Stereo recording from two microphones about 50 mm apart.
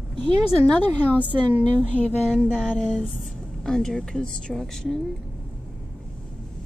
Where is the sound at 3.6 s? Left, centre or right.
Centre.